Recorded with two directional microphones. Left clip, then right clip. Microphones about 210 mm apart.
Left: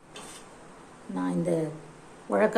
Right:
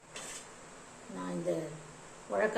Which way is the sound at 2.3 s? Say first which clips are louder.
Left 7 dB; 55° left (ahead or behind).